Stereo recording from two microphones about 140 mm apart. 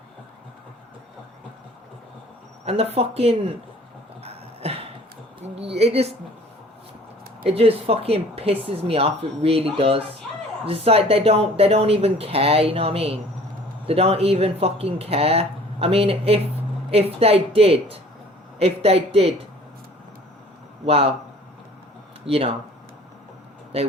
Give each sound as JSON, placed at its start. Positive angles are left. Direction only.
{"t": 2.6, "sound": "speech", "side_deg": -45}
{"t": 4.2, "sound": "a sound", "side_deg": -45}
{"t": 5.5, "sound": "speech", "side_deg": -45}
{"t": 7.4, "sound": "speech", "side_deg": -45}
{"t": 20.8, "sound": "speech", "side_deg": -45}
{"t": 22.3, "sound": "speech", "side_deg": -45}